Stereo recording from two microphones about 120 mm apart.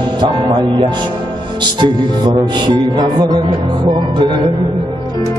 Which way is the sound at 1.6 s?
40° right (ahead or behind).